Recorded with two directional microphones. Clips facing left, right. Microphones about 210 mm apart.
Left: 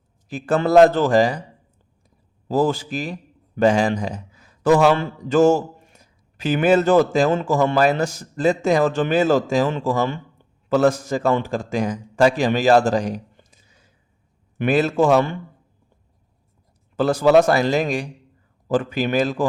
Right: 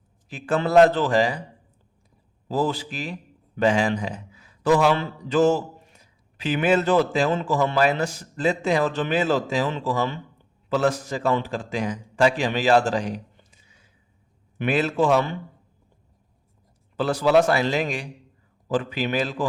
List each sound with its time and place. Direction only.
0.3 s a man's voice: 40° left (ahead or behind)
2.5 s a man's voice: 45° left (ahead or behind)
17.0 s a man's voice: 45° left (ahead or behind)